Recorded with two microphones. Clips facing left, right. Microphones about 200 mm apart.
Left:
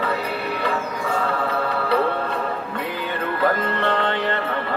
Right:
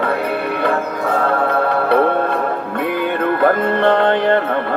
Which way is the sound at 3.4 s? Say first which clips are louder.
Right 7 dB; 50° right (ahead or behind).